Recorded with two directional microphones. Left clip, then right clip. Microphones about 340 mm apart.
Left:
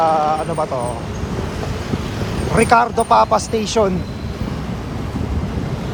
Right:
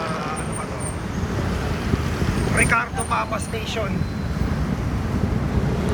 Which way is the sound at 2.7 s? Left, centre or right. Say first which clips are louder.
Left 9 dB; centre.